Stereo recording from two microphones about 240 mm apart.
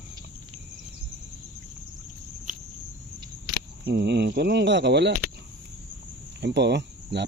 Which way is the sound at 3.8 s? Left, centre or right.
Right.